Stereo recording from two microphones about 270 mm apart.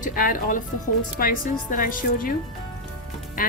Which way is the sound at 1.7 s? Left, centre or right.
Left.